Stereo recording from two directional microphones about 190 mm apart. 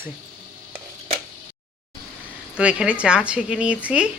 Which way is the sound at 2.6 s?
5° right (ahead or behind).